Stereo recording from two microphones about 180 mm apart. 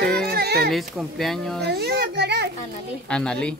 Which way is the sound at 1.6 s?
65° right (ahead or behind).